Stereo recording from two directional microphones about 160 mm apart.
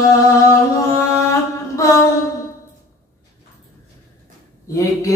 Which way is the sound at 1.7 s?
20° left (ahead or behind).